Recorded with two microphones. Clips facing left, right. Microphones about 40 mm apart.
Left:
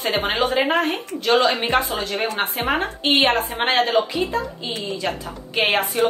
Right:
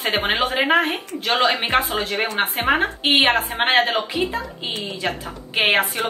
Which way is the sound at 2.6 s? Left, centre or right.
Right.